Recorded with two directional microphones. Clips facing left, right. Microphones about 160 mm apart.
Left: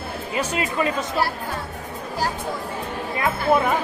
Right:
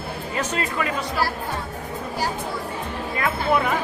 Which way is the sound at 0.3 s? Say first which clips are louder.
Left 2 dB; 15° left (ahead or behind).